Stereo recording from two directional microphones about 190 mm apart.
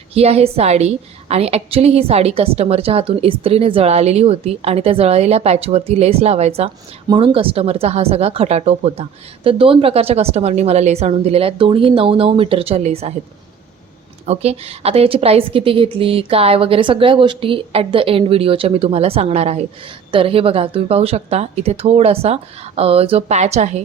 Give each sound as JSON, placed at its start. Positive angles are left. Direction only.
{"t": 0.1, "sound": "a woman's voice", "side_deg": -30}
{"t": 14.3, "sound": "a woman's voice", "side_deg": -35}